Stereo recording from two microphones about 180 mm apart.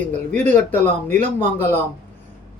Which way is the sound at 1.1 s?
40° right (ahead or behind).